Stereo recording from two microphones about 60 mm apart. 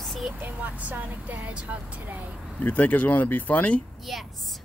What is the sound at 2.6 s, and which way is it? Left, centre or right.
Speech, left.